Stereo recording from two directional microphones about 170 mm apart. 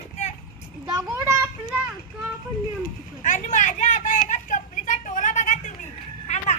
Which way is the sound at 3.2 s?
50° left (ahead or behind).